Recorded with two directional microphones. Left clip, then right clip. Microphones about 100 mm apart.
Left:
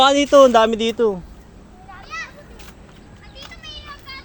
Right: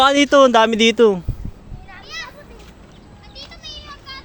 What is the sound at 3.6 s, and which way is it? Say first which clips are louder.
Children playing: right 1 dB; 70° right (ahead or behind).